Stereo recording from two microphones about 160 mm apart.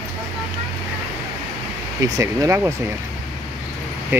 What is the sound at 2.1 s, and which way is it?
Speech, 20° right (ahead or behind).